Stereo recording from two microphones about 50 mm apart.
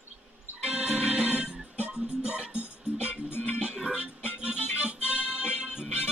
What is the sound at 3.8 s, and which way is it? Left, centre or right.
Music, centre.